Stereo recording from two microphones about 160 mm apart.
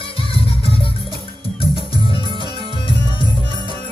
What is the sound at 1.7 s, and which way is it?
Music, 35° left (ahead or behind).